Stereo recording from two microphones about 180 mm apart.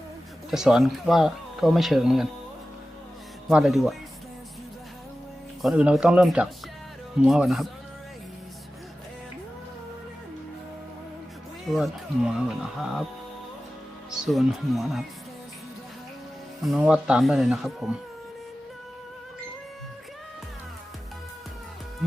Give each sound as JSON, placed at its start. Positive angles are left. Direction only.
{"t": 0.5, "sound": "speech", "side_deg": 0}
{"t": 3.5, "sound": "speech", "side_deg": 0}
{"t": 5.6, "sound": "speech", "side_deg": -5}
{"t": 11.7, "sound": "speech", "side_deg": -5}
{"t": 14.1, "sound": "speech", "side_deg": 0}
{"t": 16.6, "sound": "speech", "side_deg": -5}